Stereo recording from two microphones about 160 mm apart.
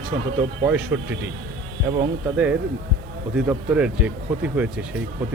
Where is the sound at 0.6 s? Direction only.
15° right (ahead or behind).